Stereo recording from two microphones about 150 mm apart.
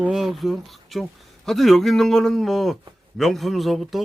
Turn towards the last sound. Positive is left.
turn(degrees=0)  # may be behind; listen again after turning